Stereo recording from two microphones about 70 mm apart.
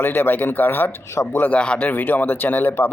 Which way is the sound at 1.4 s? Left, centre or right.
Centre.